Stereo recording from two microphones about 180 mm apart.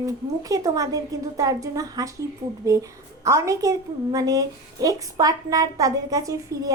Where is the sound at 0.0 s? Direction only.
20° right (ahead or behind).